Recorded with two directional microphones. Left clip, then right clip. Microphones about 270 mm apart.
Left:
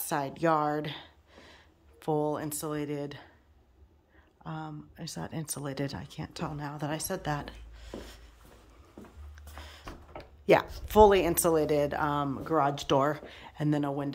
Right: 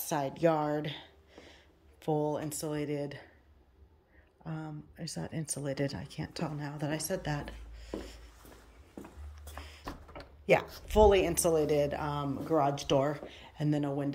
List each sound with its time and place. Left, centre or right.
0.1 s speech: centre
4.5 s speech: centre
10.4 s speech: centre